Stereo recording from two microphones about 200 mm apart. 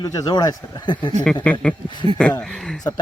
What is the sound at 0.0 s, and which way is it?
Speech, 20° left (ahead or behind).